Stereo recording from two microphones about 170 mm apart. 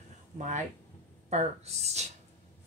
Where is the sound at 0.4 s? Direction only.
45° right (ahead or behind).